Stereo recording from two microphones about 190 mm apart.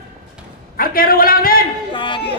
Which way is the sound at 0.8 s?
50° left (ahead or behind).